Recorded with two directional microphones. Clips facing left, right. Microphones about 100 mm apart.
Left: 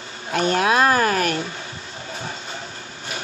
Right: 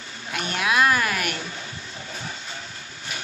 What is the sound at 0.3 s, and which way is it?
A woman's voice, 35° left (ahead or behind).